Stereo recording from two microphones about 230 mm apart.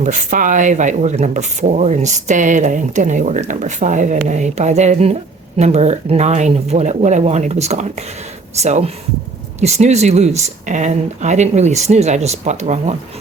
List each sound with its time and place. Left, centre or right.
0.0 s speech: right